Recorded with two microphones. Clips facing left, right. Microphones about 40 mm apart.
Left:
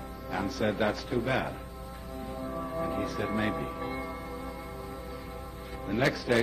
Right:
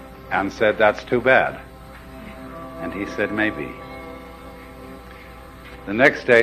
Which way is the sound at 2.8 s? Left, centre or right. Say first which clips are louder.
Right 9 dB; right.